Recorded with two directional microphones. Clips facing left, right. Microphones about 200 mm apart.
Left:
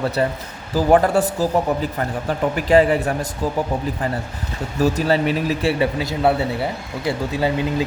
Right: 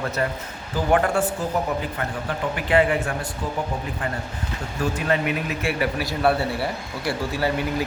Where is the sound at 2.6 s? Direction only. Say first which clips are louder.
Left 5 dB; 40° left (ahead or behind).